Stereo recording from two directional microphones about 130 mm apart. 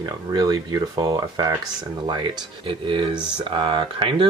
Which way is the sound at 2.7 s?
40° right (ahead or behind).